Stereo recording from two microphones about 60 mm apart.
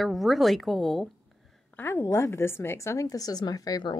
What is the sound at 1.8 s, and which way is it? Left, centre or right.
A woman's voice, left.